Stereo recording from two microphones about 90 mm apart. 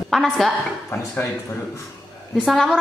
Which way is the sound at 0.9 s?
30° left (ahead or behind).